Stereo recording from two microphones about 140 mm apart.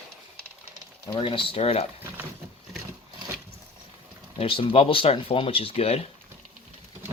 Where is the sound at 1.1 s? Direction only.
40° left (ahead or behind).